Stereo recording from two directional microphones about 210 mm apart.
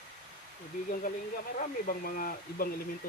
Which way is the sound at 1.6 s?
40° left (ahead or behind).